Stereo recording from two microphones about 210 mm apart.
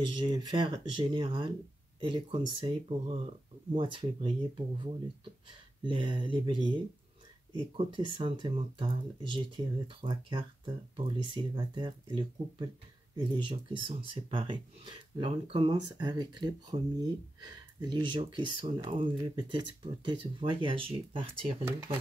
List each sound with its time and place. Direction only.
0.0 s speech: 20° right (ahead or behind)